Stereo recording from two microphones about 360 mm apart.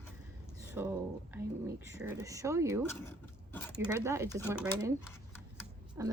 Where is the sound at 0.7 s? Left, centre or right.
Centre.